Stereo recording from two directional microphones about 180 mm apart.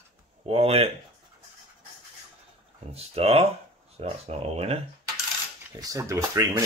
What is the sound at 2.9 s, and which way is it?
Speech, 35° right (ahead or behind).